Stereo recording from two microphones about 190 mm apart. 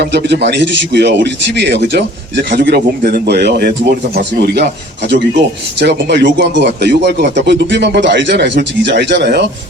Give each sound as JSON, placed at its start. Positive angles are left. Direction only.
{"t": 0.0, "sound": "a man's voice", "side_deg": -65}
{"t": 5.8, "sound": "a man's voice", "side_deg": -65}